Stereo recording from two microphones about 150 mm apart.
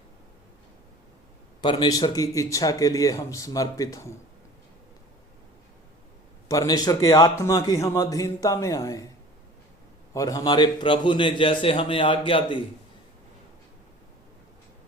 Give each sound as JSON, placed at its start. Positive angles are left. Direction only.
{"t": 1.6, "sound": "a man's voice", "side_deg": 30}
{"t": 6.5, "sound": "a man's voice", "side_deg": 25}
{"t": 10.2, "sound": "a man's voice", "side_deg": 25}